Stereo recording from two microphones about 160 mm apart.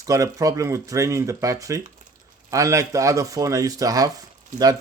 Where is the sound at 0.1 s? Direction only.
20° right (ahead or behind).